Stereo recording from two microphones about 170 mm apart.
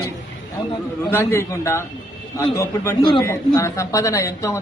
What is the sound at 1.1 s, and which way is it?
Speech, 15° left (ahead or behind).